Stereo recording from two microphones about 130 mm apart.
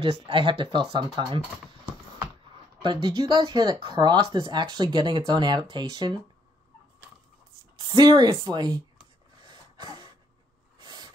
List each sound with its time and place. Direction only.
0.0 s speech: 40° right (ahead or behind)
2.8 s speech: 35° right (ahead or behind)
7.9 s speech: 35° right (ahead or behind)
9.4 s cough: 35° right (ahead or behind)
10.8 s a sound: 30° right (ahead or behind)